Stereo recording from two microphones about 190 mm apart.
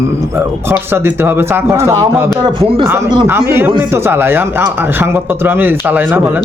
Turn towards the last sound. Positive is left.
turn(degrees=-10)  # may be behind; listen again after turning